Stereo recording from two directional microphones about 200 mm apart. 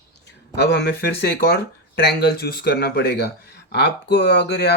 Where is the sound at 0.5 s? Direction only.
55° left (ahead or behind).